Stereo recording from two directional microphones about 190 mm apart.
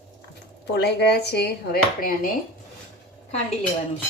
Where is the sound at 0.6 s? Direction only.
60° left (ahead or behind).